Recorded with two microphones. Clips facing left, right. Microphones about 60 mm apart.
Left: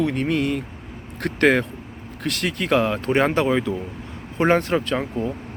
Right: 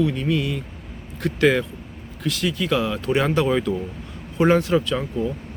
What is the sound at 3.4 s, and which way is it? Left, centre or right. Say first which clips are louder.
Speech: even; centre.